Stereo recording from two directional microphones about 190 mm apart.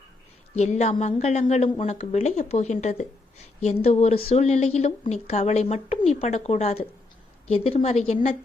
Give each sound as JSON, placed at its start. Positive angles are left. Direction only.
{"t": 0.5, "sound": "speech", "side_deg": 35}